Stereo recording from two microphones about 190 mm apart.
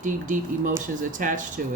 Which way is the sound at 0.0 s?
45° right (ahead or behind).